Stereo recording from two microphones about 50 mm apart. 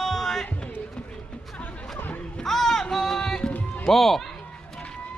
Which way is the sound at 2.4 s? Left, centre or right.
Centre.